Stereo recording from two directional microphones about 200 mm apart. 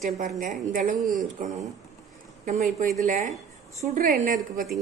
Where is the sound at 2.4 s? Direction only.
40° right (ahead or behind).